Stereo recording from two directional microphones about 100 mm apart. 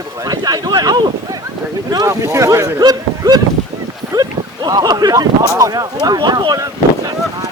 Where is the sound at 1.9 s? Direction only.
35° right (ahead or behind).